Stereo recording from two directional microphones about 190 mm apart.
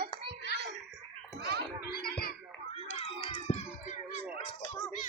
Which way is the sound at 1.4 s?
60° right (ahead or behind).